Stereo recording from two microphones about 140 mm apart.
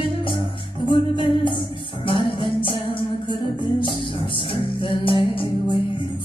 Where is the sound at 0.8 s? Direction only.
35° left (ahead or behind).